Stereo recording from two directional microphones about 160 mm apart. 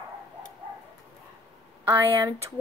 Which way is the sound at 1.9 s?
15° right (ahead or behind).